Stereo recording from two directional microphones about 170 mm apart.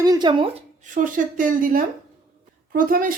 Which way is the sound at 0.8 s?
50° right (ahead or behind).